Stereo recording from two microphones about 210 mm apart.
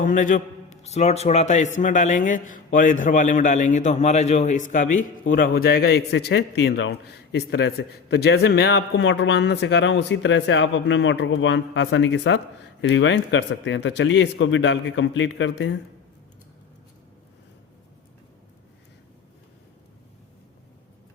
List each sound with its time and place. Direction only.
0.0 s a man's voice: 40° left (ahead or behind); by 15.7 s 65° left (ahead or behind)